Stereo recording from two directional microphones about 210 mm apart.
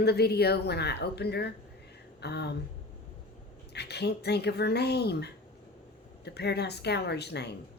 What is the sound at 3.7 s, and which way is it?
A woman's voice, 50° left (ahead or behind).